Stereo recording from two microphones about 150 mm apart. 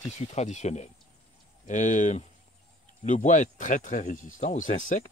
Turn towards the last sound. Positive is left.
turn(degrees=60)  # may be behind; listen again after turning